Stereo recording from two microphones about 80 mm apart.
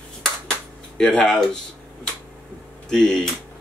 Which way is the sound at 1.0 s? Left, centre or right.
Centre.